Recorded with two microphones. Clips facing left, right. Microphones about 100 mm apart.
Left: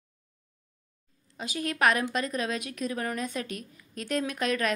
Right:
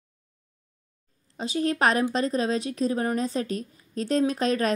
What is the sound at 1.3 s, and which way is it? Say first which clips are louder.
A woman's voice: right 7 dB; 30° right (ahead or behind).